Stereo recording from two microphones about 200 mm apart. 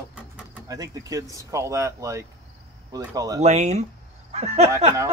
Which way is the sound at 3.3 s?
35° right (ahead or behind).